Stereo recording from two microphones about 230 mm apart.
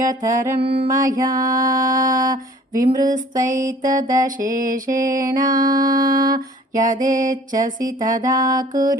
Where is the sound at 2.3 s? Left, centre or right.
Right.